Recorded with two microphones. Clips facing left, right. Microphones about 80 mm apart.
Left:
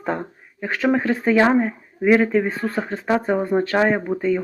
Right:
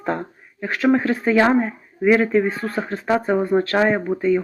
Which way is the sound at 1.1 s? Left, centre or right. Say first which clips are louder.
Even; left.